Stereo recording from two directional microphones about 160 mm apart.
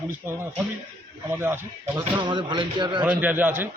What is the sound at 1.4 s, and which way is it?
Speech, 15° right (ahead or behind).